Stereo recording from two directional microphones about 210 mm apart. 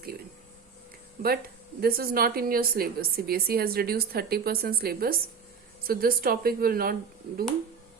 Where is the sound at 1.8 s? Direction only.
45° right (ahead or behind).